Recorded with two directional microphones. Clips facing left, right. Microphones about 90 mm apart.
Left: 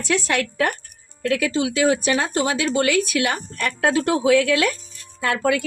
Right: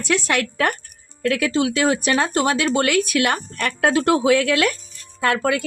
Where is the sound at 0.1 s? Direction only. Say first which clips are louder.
Right 1 dB; 65° right (ahead or behind).